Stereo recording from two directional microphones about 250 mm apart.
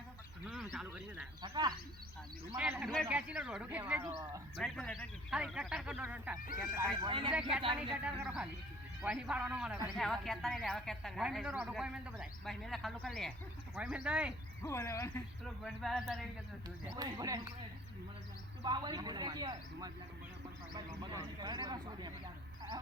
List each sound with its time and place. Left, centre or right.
0.4 s speech: centre
1.4 s speech: centre
2.6 s a man's voice: centre
4.6 s a man's voice: centre; by 7.3 s right
7.8 s a man's voice: centre
14.6 s a man's voice: centre
16.9 s speech: centre
18.6 s speech: centre